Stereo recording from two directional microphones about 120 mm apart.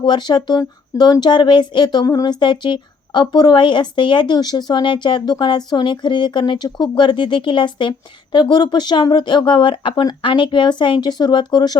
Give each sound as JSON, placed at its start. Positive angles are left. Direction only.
{"t": 0.0, "sound": "speech", "side_deg": 40}